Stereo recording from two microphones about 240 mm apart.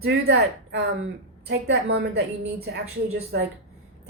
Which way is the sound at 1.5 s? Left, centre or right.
Right.